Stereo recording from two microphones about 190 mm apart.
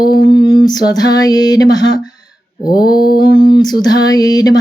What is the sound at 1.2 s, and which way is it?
Speech, 20° left (ahead or behind).